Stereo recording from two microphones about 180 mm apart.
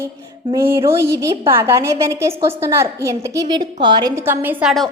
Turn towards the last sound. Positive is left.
turn(degrees=-5)  # may be behind; listen again after turning